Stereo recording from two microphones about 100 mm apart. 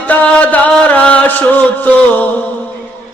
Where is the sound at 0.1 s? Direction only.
15° left (ahead or behind).